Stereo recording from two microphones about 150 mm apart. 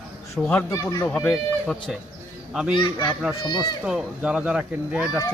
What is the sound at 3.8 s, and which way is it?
Speech, 5° right (ahead or behind).